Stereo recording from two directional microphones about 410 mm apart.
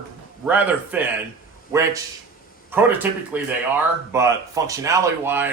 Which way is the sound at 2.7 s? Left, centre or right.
Centre.